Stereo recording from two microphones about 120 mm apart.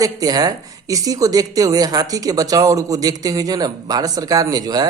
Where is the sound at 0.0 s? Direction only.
30° right (ahead or behind).